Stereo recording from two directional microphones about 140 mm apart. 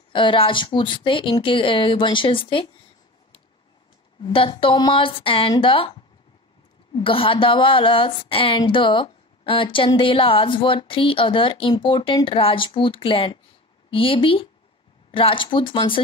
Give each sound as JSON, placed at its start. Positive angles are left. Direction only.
{"t": 0.1, "sound": "speech", "side_deg": 35}
{"t": 4.2, "sound": "speech", "side_deg": 35}